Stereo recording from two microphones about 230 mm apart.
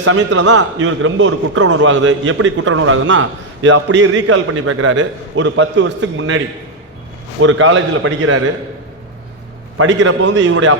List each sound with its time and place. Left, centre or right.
0.0 s a man's voice: right
0.5 s a man's voice: right
5.4 s a man's voice: right
7.4 s a man's voice: right
9.7 s a man's voice: right